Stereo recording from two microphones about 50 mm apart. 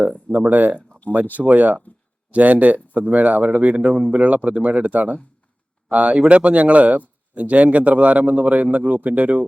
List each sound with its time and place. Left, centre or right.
0.0 s a man's voice: right